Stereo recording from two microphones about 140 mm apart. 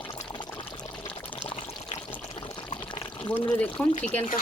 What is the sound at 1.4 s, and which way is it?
Water, 45° left (ahead or behind).